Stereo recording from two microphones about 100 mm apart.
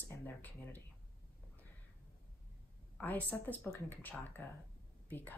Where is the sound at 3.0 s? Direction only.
20° left (ahead or behind).